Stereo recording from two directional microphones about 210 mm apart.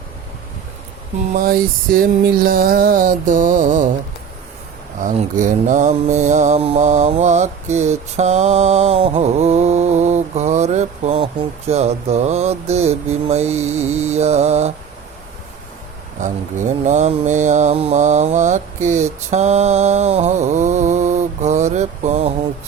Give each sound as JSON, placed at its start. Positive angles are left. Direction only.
{"t": 1.3, "sound": "music", "side_deg": -45}
{"t": 5.0, "sound": "mantra", "side_deg": -35}
{"t": 16.2, "sound": "mantra", "side_deg": -35}